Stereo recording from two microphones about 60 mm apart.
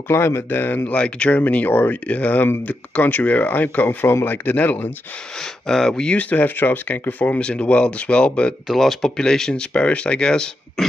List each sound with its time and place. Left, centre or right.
0.1 s speech: left
0.8 s speech: centre
5.4 s speech: centre
6.1 s speech: left
8.6 s speech: centre